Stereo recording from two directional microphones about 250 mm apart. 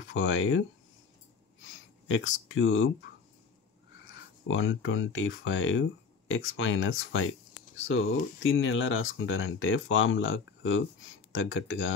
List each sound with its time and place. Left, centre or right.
0.1 s speech: left
2.0 s speech: left
4.5 s speech: left